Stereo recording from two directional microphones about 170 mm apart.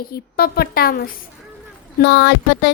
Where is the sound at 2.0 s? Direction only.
75° left (ahead or behind).